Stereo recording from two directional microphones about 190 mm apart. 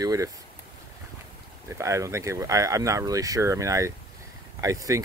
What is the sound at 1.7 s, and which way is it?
Speech, 15° right (ahead or behind).